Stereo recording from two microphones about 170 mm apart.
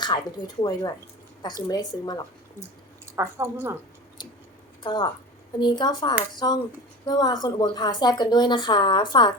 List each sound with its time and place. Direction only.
0.0 s a woman's voice: 25° left (ahead or behind)
3.1 s speech: 15° right (ahead or behind)
4.2 s a woman's voice: 25° left (ahead or behind)